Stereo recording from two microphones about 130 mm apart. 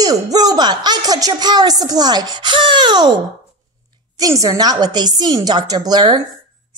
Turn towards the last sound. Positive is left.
turn(degrees=-30)  # may be behind; listen again after turning